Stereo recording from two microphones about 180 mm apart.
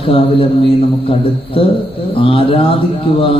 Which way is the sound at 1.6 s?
30° left (ahead or behind).